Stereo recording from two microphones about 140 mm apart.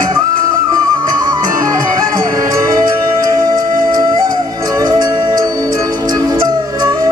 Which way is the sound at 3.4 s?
30° right (ahead or behind).